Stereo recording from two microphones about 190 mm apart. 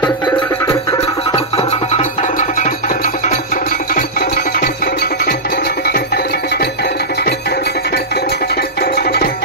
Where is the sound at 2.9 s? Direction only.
45° left (ahead or behind).